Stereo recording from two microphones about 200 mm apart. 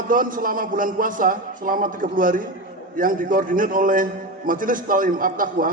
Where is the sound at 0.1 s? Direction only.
40° right (ahead or behind).